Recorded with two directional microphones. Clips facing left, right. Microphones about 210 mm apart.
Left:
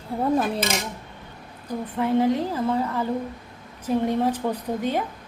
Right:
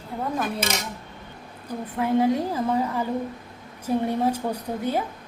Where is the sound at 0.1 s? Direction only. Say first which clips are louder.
Left 5 dB; 30° left (ahead or behind).